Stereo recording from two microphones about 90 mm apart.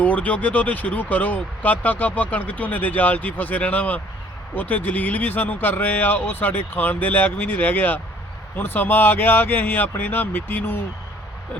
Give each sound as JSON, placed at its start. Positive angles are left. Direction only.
{"t": 0.0, "sound": "speech", "side_deg": 15}